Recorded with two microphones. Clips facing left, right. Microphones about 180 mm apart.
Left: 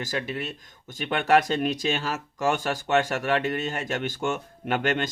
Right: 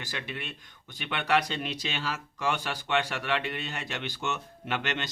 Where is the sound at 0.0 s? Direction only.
40° left (ahead or behind).